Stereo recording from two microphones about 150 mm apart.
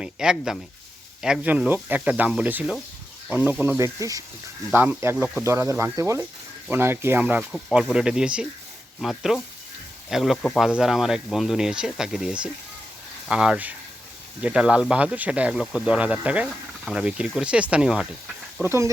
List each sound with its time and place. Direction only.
0.0 s speech: 5° right (ahead or behind)
3.8 s speech: 20° right (ahead or behind); by 10.3 s centre (ahead or behind)
10.3 s speech: 10° left (ahead or behind)
10.6 s speech: 5° right (ahead or behind)
18.6 s speech: 20° right (ahead or behind)